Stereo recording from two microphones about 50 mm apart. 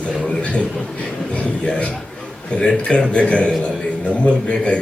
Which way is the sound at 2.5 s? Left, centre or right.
Left.